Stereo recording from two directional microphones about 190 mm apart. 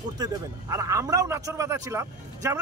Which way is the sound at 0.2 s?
20° right (ahead or behind).